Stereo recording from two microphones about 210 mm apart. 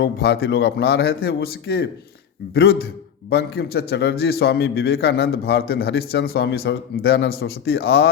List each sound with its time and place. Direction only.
0.0 s a man's voice: 50° left (ahead or behind)